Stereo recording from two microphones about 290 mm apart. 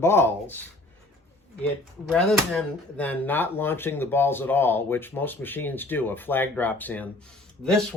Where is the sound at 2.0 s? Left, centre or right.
Centre.